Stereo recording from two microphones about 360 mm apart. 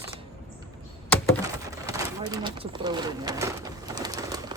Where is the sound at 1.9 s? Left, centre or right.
Centre.